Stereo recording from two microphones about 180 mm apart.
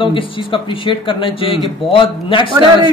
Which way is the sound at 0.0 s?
30° left (ahead or behind).